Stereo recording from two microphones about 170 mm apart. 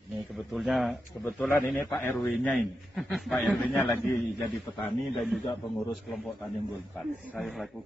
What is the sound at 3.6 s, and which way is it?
Speech, 10° left (ahead or behind).